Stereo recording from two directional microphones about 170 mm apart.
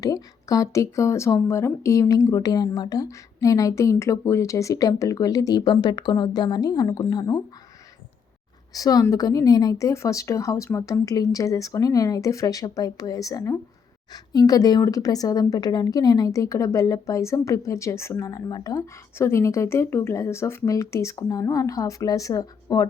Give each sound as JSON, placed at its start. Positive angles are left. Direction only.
{"t": 0.0, "sound": "a woman's voice", "side_deg": 20}
{"t": 8.7, "sound": "a woman's voice", "side_deg": 20}